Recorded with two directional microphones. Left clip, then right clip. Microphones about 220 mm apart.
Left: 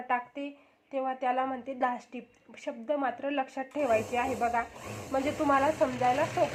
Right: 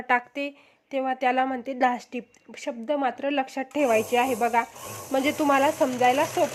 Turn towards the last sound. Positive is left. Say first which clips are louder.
# right 5 dB
turn(degrees=-50)  # may be behind; listen again after turning